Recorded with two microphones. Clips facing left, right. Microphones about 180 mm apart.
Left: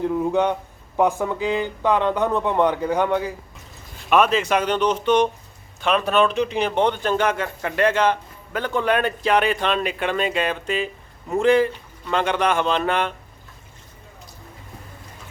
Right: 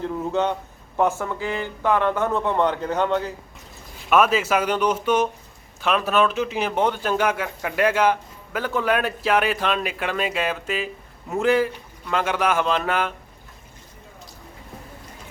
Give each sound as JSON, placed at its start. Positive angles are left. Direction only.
{"t": 0.0, "sound": "a sound", "side_deg": 15}
{"t": 0.9, "sound": "speech", "side_deg": 15}
{"t": 4.1, "sound": "a man's voice", "side_deg": -5}